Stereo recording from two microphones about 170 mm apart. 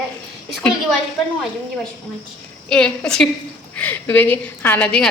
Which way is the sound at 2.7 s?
5° left (ahead or behind).